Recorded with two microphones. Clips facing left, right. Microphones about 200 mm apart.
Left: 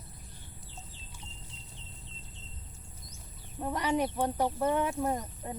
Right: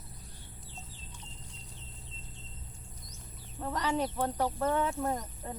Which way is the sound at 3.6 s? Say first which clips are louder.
Left 2 dB; 15° left (ahead or behind).